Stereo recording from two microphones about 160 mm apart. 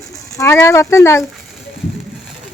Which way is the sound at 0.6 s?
15° left (ahead or behind).